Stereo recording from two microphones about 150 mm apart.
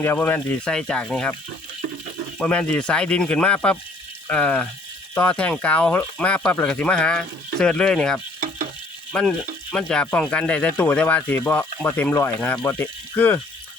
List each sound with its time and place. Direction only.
0.0 s speech: 15° left (ahead or behind)
2.4 s speech: 10° left (ahead or behind)